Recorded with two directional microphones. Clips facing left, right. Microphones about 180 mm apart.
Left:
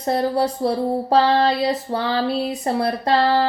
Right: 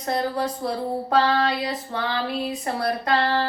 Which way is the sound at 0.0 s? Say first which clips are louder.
Left 5 dB; 30° left (ahead or behind).